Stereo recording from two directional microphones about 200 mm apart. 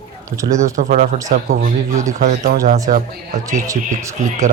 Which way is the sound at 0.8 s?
40° right (ahead or behind).